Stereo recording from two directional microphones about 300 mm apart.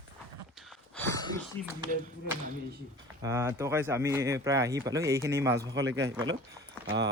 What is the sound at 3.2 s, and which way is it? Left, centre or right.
Speech, centre.